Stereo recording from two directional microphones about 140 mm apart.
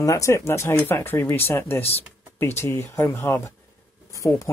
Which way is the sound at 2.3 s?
15° left (ahead or behind).